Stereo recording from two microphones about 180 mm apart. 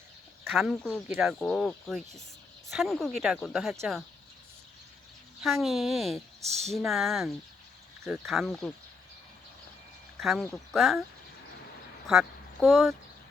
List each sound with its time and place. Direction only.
0.5 s speech: centre (ahead or behind)
5.6 s speech: centre (ahead or behind)
6.4 s speech: 35° right (ahead or behind)
6.7 s speech: centre (ahead or behind)
10.2 s speech: centre (ahead or behind)
12.0 s a woman's voice: centre (ahead or behind)